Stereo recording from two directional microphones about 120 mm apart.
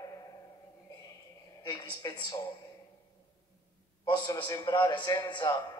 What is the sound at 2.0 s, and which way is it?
Speech, 30° left (ahead or behind).